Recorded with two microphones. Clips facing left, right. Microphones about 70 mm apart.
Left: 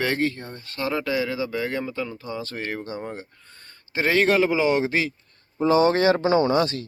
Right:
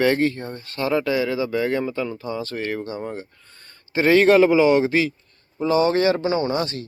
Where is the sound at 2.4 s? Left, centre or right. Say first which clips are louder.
Right 4 dB; centre.